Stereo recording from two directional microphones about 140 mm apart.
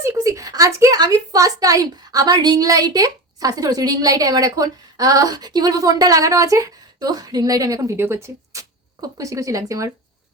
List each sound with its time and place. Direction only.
0.0 s a woman's voice: 20° right (ahead or behind)